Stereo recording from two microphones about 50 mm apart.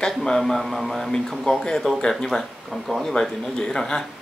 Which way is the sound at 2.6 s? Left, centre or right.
Centre.